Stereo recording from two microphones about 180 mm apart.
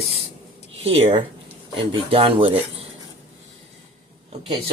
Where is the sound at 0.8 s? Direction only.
35° right (ahead or behind).